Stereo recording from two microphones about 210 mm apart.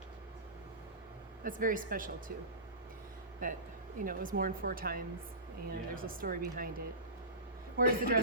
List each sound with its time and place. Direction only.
1.5 s speech: 40° right (ahead or behind)
3.4 s speech: 40° right (ahead or behind)
7.8 s speech: 45° right (ahead or behind)